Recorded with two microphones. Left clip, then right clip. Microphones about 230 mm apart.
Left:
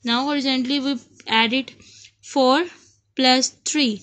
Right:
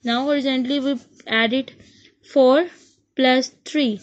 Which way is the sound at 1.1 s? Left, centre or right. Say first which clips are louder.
Left 2 dB; left.